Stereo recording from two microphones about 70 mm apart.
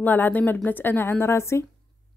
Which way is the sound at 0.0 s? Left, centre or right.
Left.